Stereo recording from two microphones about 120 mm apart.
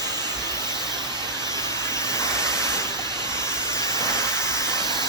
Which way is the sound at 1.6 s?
25° left (ahead or behind).